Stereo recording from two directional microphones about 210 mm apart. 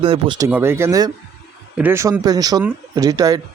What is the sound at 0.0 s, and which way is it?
A man's voice, 25° right (ahead or behind).